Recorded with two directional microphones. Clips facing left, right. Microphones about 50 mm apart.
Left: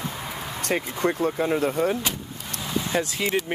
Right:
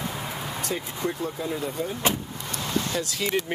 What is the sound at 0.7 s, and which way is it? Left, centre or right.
Speech, left.